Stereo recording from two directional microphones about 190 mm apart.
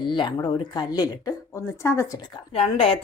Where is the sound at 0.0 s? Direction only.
25° left (ahead or behind).